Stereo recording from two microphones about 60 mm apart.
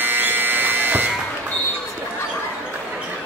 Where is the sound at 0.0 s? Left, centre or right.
Right.